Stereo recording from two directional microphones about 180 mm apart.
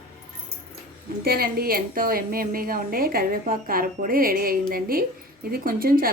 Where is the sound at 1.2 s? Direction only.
55° right (ahead or behind).